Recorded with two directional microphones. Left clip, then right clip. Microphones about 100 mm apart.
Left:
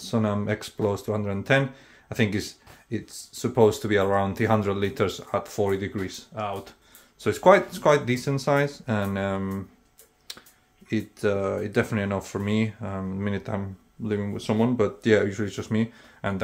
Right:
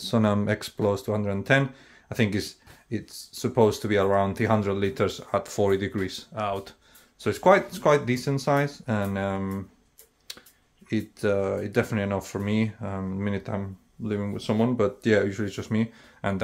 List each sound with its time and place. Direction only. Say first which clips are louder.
0.0 s speech: right 2 dB; 50° right (ahead or behind)
0.5 s speech: right 1 dB; 35° right (ahead or behind)
5.4 s speech: right 3 dB; 40° right (ahead or behind)
7.2 s speech: left 2 dB; 10° right (ahead or behind)
10.3 s a sound: left 1 dB; 15° right (ahead or behind)
10.9 s speech: even; 20° right (ahead or behind)